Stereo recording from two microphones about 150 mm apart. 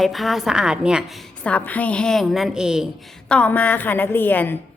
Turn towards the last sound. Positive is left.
turn(degrees=10)  # may be behind; listen again after turning